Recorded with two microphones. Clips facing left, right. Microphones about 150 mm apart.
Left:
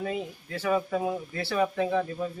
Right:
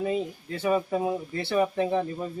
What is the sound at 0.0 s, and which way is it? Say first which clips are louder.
Speech: right 4 dB; 20° right (ahead or behind).